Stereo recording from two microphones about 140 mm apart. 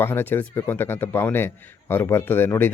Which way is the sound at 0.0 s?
15° left (ahead or behind).